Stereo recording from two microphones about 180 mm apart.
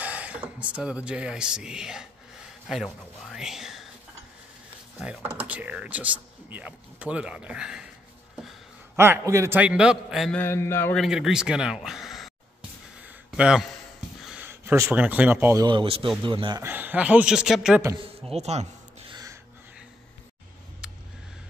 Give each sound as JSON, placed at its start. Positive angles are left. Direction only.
{"t": 0.0, "sound": "speech", "side_deg": -10}
{"t": 5.0, "sound": "speech", "side_deg": -5}
{"t": 8.9, "sound": "speech", "side_deg": -15}
{"t": 10.4, "sound": "a man's voice", "side_deg": 15}
{"t": 11.0, "sound": "speech", "side_deg": -5}
{"t": 13.0, "sound": "a sound", "side_deg": -5}
{"t": 14.2, "sound": "speech", "side_deg": -10}
{"t": 16.6, "sound": "speech", "side_deg": -10}
{"t": 17.9, "sound": "speech", "side_deg": -30}
{"t": 18.3, "sound": "a sound", "side_deg": -35}